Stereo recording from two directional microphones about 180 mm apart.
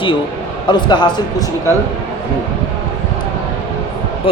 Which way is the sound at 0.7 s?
25° left (ahead or behind).